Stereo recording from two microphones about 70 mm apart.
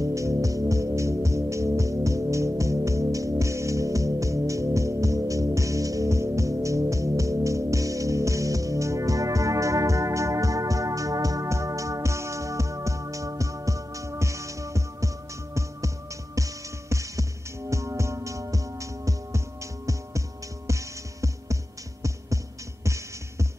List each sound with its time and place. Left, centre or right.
0.0 s music: right
16.4 s music: right